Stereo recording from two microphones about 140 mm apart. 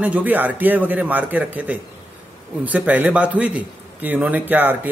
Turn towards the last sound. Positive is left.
turn(degrees=-10)  # may be behind; listen again after turning